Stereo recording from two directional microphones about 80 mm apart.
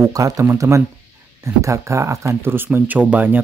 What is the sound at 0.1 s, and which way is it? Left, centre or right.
Speech, right.